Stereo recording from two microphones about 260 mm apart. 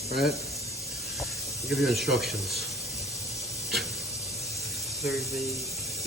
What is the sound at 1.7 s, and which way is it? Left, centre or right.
Speech, centre.